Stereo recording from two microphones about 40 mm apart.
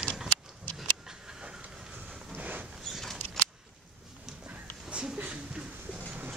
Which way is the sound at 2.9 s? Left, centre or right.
Centre.